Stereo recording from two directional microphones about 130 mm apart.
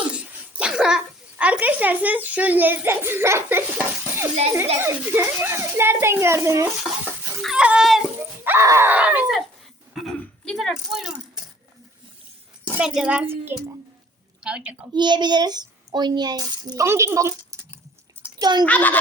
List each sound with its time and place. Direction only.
0.1 s a child's voice: 10° right (ahead or behind)
7.4 s speech: 5° right (ahead or behind)
8.2 s speech: 20° right (ahead or behind)
9.9 s burping: centre (ahead or behind)
10.2 s a sound: 5° left (ahead or behind)
12.8 s a child's voice: 5° right (ahead or behind)
14.9 s a child's voice: 35° right (ahead or behind)
18.3 s a child's voice: 30° right (ahead or behind)
18.6 s a child's voice: 10° left (ahead or behind)